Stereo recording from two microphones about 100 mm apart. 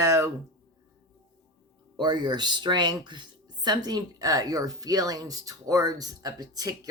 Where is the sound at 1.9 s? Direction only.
45° right (ahead or behind).